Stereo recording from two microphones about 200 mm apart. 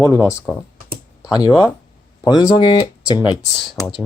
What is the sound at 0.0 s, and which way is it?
Speech, 15° left (ahead or behind).